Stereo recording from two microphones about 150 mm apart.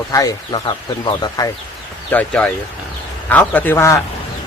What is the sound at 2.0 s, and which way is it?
A man's voice, 10° left (ahead or behind).